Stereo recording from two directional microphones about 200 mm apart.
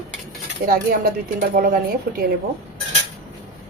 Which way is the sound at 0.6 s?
45° right (ahead or behind).